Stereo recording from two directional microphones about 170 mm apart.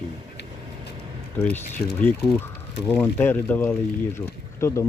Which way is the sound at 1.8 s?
15° left (ahead or behind).